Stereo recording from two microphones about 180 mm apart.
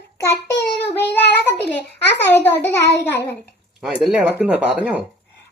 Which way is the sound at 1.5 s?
65° left (ahead or behind).